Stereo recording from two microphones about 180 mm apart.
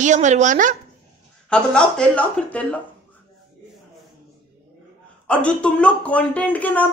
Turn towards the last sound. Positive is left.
turn(degrees=10)  # may be behind; listen again after turning